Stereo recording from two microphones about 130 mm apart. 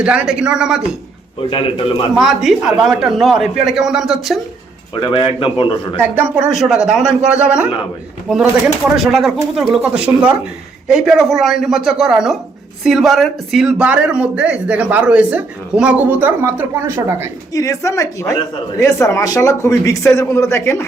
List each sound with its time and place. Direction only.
0.0 s a man's voice: 10° right (ahead or behind)
1.4 s a man's voice: 40° left (ahead or behind)
2.1 s a man's voice: 5° right (ahead or behind)
4.9 s a man's voice: 40° left (ahead or behind)
6.0 s a man's voice: 10° right (ahead or behind)
17.5 s a man's voice: 25° left (ahead or behind)